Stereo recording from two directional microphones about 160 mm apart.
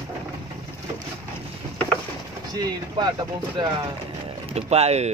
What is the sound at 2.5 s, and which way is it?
Speech, 25° right (ahead or behind).